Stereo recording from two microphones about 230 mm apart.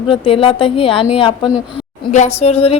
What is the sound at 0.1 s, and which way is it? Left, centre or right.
A woman's voice, left.